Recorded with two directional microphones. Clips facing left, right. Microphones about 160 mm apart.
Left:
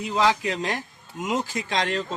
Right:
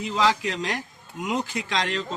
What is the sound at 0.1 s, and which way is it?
Speech, 50° left (ahead or behind).